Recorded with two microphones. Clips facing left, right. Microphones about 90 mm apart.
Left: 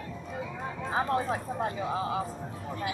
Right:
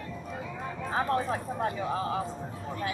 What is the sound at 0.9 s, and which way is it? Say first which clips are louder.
Speech: even; 25° left (ahead or behind).